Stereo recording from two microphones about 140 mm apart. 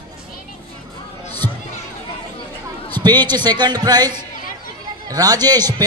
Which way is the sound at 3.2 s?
30° right (ahead or behind).